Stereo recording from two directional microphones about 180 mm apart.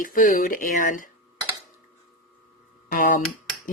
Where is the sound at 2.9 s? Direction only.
50° left (ahead or behind).